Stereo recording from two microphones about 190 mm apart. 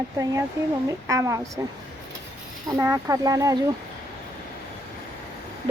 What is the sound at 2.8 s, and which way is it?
Speech, 15° right (ahead or behind).